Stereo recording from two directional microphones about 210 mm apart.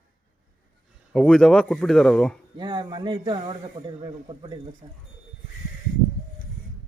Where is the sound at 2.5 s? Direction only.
20° right (ahead or behind).